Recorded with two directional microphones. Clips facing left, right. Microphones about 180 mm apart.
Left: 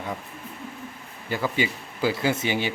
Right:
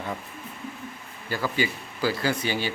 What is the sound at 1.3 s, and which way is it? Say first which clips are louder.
Speech: left 1 dB; 20° left (ahead or behind).